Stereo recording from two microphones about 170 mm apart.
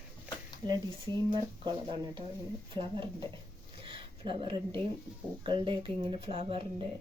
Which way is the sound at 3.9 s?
30° right (ahead or behind).